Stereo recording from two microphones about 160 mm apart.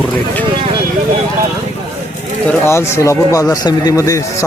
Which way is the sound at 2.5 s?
15° left (ahead or behind).